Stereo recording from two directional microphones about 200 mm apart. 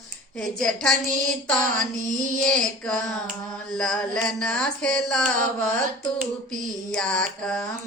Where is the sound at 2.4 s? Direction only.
5° left (ahead or behind).